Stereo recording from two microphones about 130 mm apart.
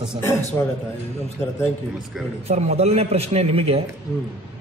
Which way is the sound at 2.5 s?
55° right (ahead or behind).